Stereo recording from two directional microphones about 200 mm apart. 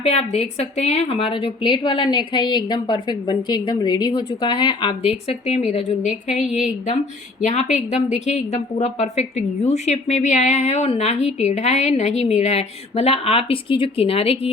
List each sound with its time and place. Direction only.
0.0 s a woman's voice: 30° left (ahead or behind)
7.4 s a woman's voice: 35° left (ahead or behind)